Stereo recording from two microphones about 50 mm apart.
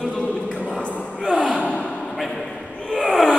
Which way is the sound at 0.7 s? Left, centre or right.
Centre.